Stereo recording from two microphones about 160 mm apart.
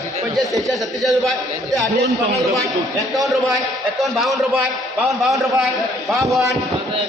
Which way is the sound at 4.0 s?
Centre (ahead or behind).